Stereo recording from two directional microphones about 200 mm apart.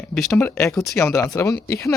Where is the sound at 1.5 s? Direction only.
55° left (ahead or behind).